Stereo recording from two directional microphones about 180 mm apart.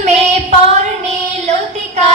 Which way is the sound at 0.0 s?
40° right (ahead or behind).